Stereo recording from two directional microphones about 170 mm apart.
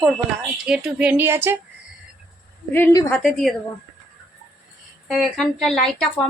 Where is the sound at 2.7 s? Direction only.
15° left (ahead or behind).